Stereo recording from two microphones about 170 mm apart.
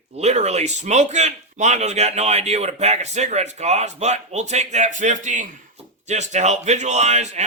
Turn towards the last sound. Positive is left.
turn(degrees=-40)  # may be behind; listen again after turning